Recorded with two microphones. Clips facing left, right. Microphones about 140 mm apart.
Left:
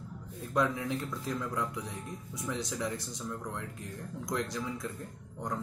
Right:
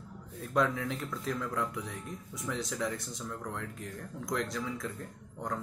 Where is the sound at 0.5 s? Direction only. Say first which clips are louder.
Even; 15° left (ahead or behind).